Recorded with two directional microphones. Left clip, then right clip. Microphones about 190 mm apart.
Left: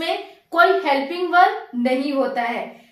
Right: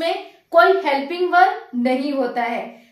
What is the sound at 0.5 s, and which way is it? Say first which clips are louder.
A woman's voice: right 2 dB; 25° right (ahead or behind).